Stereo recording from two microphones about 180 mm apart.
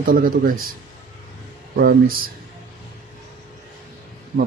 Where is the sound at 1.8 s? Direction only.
55° right (ahead or behind).